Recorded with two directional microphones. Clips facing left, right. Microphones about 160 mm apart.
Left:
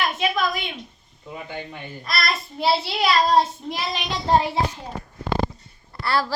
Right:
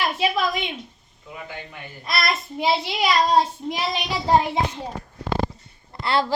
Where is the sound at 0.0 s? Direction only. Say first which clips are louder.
Right 1 dB; 30° right (ahead or behind).